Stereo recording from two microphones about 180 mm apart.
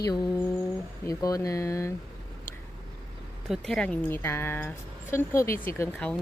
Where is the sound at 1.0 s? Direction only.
20° left (ahead or behind).